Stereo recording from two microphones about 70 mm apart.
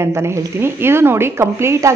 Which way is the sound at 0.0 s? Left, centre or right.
Right.